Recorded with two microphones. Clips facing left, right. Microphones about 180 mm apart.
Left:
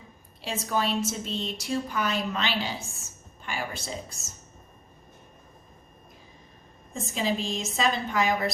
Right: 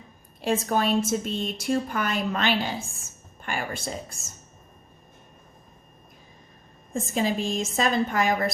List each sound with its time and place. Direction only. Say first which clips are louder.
0.4 s a woman's voice: right 5 dB; 50° right (ahead or behind)
6.9 s a woman's voice: right 3 dB; 50° right (ahead or behind)